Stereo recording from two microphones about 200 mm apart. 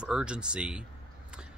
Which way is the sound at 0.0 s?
5° right (ahead or behind).